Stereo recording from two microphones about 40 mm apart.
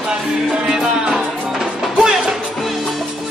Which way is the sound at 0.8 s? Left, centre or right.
Centre.